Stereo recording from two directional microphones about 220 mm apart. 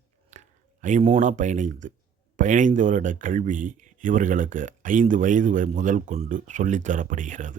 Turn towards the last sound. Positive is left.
turn(degrees=-35)  # may be behind; listen again after turning